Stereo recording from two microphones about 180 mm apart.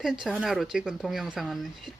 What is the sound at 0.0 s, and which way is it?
Speech, 5° right (ahead or behind).